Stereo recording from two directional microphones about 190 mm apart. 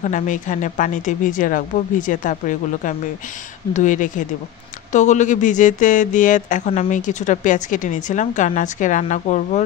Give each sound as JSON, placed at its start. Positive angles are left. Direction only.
{"t": 0.0, "sound": "a woman's voice", "side_deg": 40}